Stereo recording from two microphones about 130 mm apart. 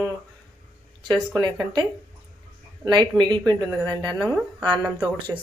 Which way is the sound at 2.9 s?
35° right (ahead or behind).